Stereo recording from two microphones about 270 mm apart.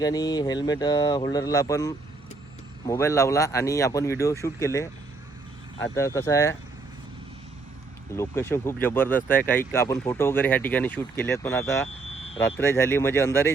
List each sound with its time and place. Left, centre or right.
0.0 s speech: centre
8.1 s speech: centre